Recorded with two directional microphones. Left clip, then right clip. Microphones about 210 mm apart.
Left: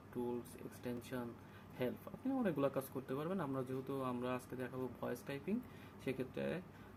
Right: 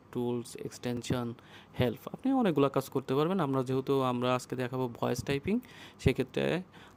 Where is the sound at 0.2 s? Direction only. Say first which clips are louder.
Right 9 dB; 55° right (ahead or behind).